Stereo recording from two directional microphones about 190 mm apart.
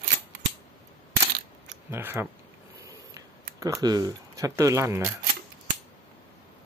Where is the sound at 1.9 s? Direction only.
10° right (ahead or behind).